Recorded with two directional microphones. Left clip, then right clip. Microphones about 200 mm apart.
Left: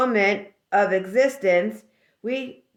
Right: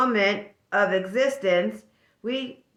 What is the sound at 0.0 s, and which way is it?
Speech, 25° left (ahead or behind).